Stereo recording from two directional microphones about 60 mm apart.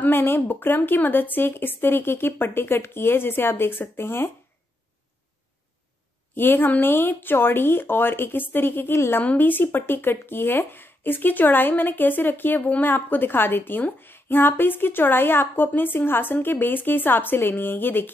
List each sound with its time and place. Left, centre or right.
0.0 s speech: left
6.3 s speech: left
9.2 s speech: left